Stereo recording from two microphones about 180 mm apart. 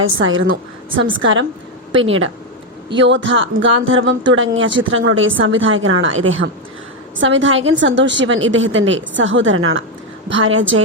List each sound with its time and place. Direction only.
0.0 s speech: 90° right